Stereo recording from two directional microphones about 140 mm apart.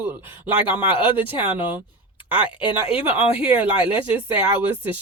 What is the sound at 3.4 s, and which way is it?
Speech, 10° right (ahead or behind).